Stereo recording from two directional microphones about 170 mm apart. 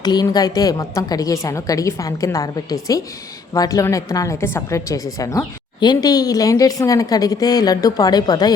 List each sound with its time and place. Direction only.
0.0 s a woman's voice: 25° left (ahead or behind)